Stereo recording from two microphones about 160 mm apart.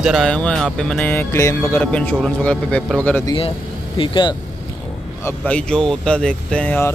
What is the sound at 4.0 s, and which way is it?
Speech, 30° left (ahead or behind).